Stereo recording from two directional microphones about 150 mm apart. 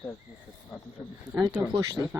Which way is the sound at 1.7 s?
20° right (ahead or behind).